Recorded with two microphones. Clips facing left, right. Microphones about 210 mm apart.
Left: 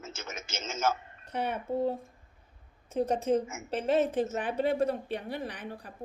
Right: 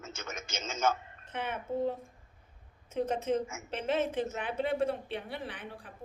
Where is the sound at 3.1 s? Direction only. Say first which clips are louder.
Left 4 dB; 35° left (ahead or behind).